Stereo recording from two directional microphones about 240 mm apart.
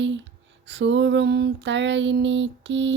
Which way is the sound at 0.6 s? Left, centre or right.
Right.